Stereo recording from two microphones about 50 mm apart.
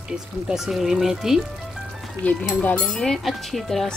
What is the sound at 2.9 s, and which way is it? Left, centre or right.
Speech, centre.